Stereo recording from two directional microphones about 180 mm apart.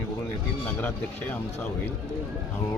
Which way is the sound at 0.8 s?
10° left (ahead or behind).